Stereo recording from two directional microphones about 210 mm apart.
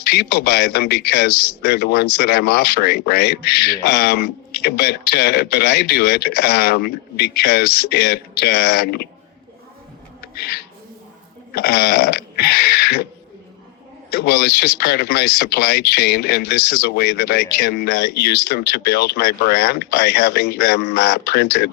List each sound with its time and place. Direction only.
0.0 s a man's voice: 50° left (ahead or behind)
10.2 s a sound: 50° left (ahead or behind)
11.5 s a man's voice: 50° left (ahead or behind)
14.1 s a man's voice: 50° left (ahead or behind)